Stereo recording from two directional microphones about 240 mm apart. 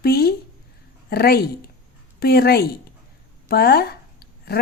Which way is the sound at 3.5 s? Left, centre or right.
Left.